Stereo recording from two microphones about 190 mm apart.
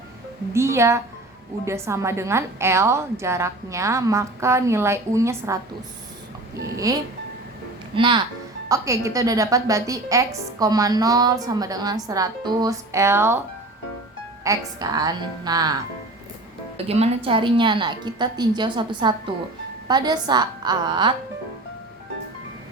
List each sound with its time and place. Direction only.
0.5 s a woman's voice: 15° right (ahead or behind)
6.9 s a woman's voice: 20° right (ahead or behind)
14.4 s a woman's voice: 15° right (ahead or behind)
16.7 s a woman's voice: 35° right (ahead or behind)